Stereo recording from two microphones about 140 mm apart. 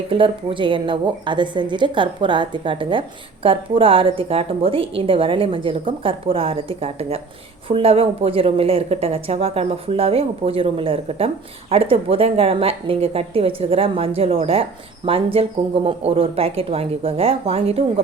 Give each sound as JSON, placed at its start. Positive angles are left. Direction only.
{"t": 0.1, "sound": "a woman's voice", "side_deg": -40}